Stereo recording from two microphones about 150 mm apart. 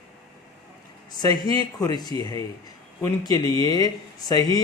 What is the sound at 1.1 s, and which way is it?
Speech, 25° left (ahead or behind).